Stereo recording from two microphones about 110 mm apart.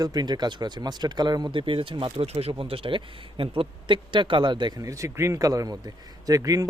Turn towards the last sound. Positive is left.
turn(degrees=-30)  # may be behind; listen again after turning